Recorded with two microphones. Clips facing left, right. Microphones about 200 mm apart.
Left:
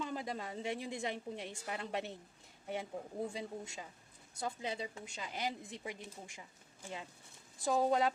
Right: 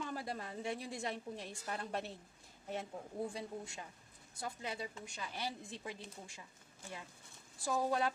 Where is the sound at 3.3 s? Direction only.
20° left (ahead or behind).